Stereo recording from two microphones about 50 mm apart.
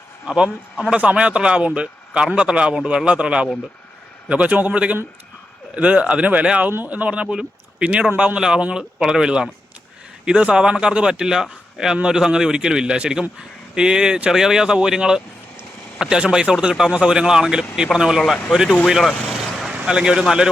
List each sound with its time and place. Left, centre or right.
0.3 s speech: centre
6.7 s a man's voice: right
6.9 s speech: right
8.4 s speech: centre
19.7 s a man's voice: centre